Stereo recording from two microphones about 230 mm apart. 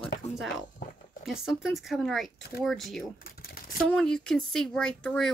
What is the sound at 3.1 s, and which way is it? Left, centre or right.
Typing, left.